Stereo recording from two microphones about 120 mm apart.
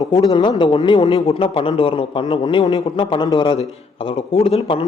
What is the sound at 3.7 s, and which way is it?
A man's voice, 55° left (ahead or behind).